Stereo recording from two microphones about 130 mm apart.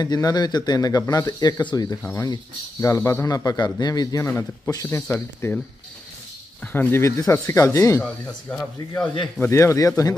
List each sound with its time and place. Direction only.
0.0 s speech: 30° left (ahead or behind)
6.6 s speech: 15° left (ahead or behind)
8.0 s speech: 10° left (ahead or behind); by 10.1 s 25° left (ahead or behind)